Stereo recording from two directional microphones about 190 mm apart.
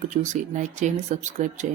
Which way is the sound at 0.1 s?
35° right (ahead or behind).